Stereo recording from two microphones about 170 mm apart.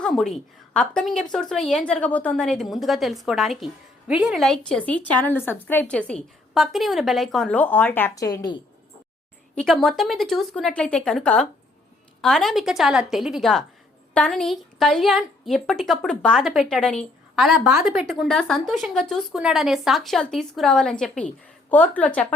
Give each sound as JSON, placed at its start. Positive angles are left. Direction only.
{"t": 0.0, "sound": "a woman's voice", "side_deg": 5}
{"t": 9.6, "sound": "a woman's voice", "side_deg": 0}